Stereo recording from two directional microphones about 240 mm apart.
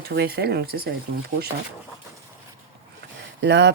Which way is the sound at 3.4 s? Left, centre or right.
Right.